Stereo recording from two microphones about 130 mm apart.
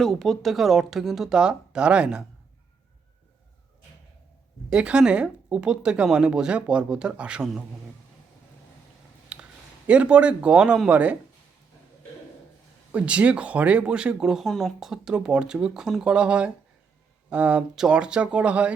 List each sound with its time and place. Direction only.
0.0 s speech: 5° left (ahead or behind)
4.7 s speech: 5° right (ahead or behind)
9.3 s speech: 10° right (ahead or behind)
12.9 s speech: 10° right (ahead or behind)